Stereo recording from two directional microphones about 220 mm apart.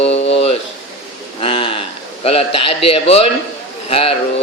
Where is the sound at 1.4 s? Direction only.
25° left (ahead or behind).